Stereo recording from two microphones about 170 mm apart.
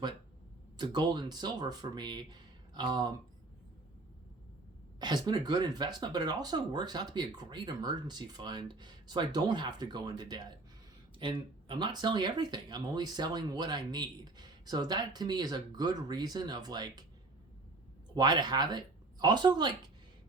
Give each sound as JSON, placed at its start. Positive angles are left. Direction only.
{"t": 0.8, "sound": "speech", "side_deg": -25}
{"t": 4.9, "sound": "speech", "side_deg": -25}
{"t": 18.1, "sound": "speech", "side_deg": -25}